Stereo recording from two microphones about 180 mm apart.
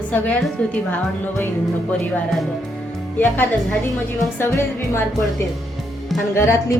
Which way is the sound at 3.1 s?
10° left (ahead or behind).